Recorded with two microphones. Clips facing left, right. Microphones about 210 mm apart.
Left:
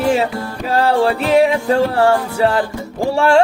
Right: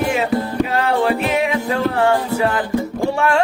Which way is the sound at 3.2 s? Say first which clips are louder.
Left 6 dB; 30° left (ahead or behind).